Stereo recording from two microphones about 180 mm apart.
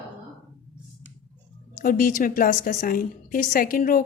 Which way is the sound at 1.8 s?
50° left (ahead or behind).